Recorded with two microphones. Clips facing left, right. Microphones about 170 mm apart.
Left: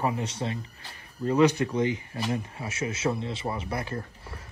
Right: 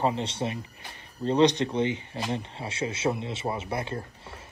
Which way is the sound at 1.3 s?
30° right (ahead or behind).